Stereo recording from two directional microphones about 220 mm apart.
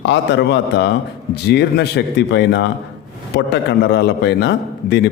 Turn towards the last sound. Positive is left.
turn(degrees=50)  # may be behind; listen again after turning